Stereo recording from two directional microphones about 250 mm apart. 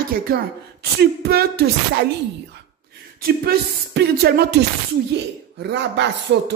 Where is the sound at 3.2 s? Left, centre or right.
Right.